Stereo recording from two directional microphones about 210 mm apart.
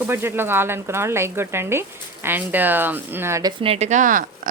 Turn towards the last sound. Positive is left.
turn(degrees=-40)  # may be behind; listen again after turning